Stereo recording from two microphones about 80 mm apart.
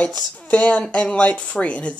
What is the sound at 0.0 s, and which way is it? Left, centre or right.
Speech, centre.